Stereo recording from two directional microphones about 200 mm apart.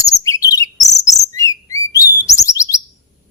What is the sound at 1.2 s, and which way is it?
Chirp, 15° left (ahead or behind).